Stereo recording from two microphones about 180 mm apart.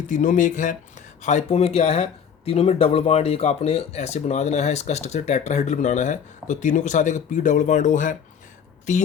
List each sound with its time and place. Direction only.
0.1 s speech: 45° left (ahead or behind)